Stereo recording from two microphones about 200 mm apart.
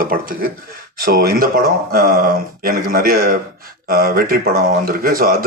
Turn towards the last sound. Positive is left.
turn(degrees=-50)  # may be behind; listen again after turning